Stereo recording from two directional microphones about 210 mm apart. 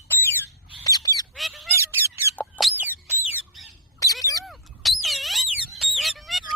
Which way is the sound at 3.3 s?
10° right (ahead or behind).